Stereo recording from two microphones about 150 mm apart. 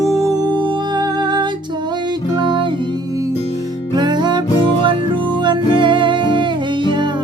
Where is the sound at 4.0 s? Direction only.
30° right (ahead or behind).